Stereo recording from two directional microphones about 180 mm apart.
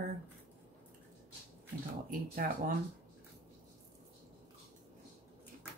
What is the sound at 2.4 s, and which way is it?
Speech, 50° right (ahead or behind).